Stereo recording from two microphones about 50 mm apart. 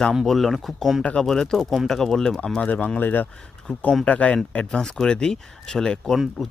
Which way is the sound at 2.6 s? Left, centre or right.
Left.